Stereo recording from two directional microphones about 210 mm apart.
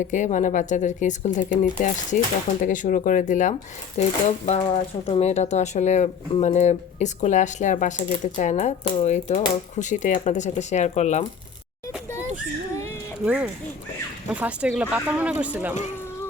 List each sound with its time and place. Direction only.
0.0 s speech: 35° left (ahead or behind)
13.2 s speech: 5° right (ahead or behind)